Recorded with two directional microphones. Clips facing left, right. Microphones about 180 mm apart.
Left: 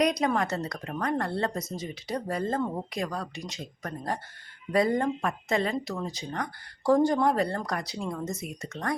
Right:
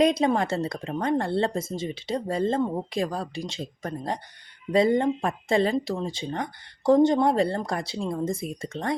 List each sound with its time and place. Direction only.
0.0 s speech: 25° right (ahead or behind)
2.9 s speech: 30° right (ahead or behind)